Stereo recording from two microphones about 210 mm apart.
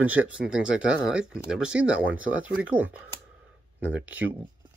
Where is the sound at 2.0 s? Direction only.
70° right (ahead or behind).